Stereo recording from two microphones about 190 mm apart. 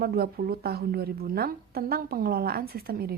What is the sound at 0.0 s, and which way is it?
A woman's voice, 55° right (ahead or behind).